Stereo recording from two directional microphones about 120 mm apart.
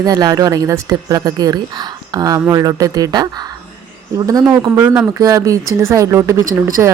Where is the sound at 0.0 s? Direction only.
30° right (ahead or behind).